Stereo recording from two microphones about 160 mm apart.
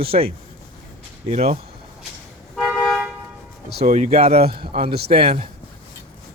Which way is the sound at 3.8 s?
50° right (ahead or behind).